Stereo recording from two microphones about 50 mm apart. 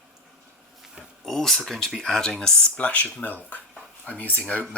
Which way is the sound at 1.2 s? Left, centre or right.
Centre.